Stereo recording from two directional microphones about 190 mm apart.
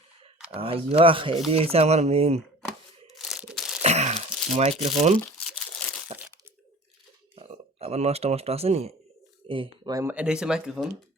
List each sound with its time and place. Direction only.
0.5 s speech: 30° right (ahead or behind)
3.2 s crunch: centre (ahead or behind)
3.8 s a sound: 35° right (ahead or behind)
4.8 s speech: 35° right (ahead or behind)
5.8 s crumpling: 5° left (ahead or behind)
7.3 s speech: 30° right (ahead or behind); by 10.8 s 5° right (ahead or behind)